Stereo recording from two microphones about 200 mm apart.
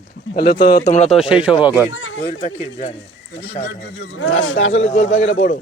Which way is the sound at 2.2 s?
35° left (ahead or behind).